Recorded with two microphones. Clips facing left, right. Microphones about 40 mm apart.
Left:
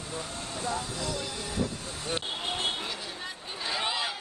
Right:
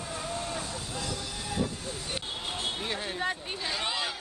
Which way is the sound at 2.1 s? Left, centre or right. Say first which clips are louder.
Left 5 dB; left.